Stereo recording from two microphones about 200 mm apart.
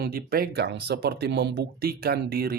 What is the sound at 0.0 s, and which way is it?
Speech, 50° right (ahead or behind).